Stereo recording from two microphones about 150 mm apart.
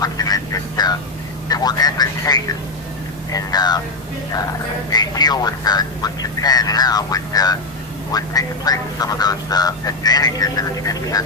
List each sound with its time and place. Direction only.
0.0 s duck: 25° left (ahead or behind)
1.5 s speech: 25° left (ahead or behind)
4.9 s speech: 25° left (ahead or behind)